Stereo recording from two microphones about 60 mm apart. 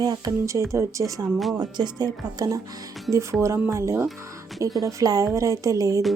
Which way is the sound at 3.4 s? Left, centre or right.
Right.